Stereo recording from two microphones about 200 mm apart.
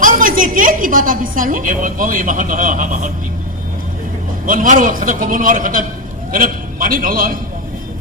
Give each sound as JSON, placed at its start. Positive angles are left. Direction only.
{"t": 0.0, "sound": "a woman's voice", "side_deg": -40}
{"t": 4.4, "sound": "a woman's voice", "side_deg": -40}